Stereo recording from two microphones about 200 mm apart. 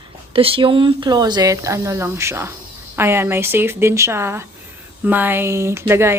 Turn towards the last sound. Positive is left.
turn(degrees=-10)  # may be behind; listen again after turning